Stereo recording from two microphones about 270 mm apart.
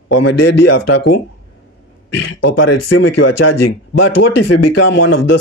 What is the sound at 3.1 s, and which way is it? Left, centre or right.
Speech, left.